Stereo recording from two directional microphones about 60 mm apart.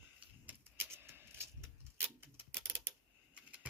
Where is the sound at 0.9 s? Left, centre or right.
Right.